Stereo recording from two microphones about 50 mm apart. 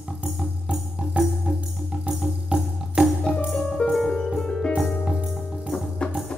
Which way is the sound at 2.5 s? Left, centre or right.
Right.